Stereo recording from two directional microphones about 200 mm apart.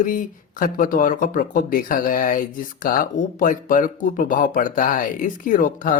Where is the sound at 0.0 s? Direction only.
40° left (ahead or behind).